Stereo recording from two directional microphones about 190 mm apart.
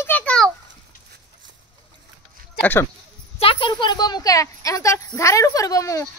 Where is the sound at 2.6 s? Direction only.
10° left (ahead or behind).